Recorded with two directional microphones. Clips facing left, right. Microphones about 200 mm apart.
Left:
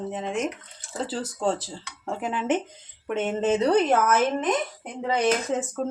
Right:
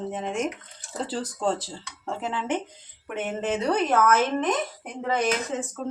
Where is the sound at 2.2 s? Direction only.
15° left (ahead or behind).